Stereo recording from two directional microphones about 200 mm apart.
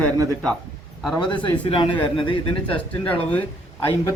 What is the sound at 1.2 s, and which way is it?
Speech, 25° left (ahead or behind).